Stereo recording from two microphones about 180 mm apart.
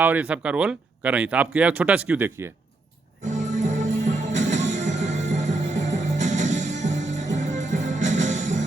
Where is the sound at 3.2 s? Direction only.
40° right (ahead or behind).